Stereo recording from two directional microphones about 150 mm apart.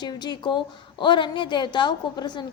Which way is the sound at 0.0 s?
30° left (ahead or behind).